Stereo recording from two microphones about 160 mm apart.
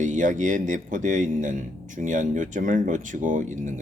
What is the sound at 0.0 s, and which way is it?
Speech, 50° right (ahead or behind).